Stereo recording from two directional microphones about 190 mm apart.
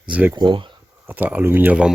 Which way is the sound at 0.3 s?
25° right (ahead or behind).